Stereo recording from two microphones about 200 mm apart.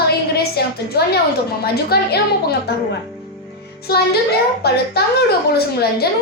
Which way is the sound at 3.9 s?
50° left (ahead or behind).